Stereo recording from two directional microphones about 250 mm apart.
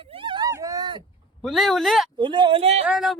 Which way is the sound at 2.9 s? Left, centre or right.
Centre.